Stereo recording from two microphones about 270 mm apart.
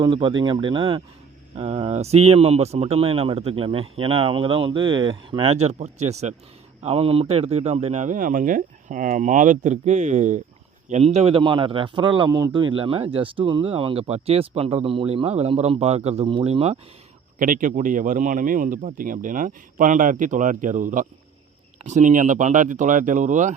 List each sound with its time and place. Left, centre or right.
0.0 s a man's voice: centre